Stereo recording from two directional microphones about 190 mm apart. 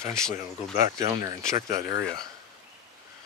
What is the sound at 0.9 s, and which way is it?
Speech, 20° right (ahead or behind).